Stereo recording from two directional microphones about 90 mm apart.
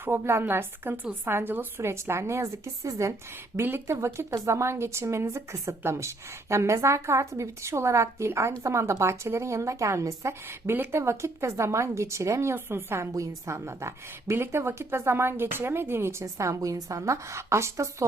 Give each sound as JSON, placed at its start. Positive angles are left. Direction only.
{"t": 0.0, "sound": "speech", "side_deg": -25}